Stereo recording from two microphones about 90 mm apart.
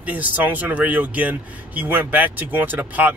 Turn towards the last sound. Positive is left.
turn(degrees=-20)  # may be behind; listen again after turning